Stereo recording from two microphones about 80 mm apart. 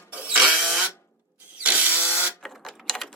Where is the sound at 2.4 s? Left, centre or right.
Centre.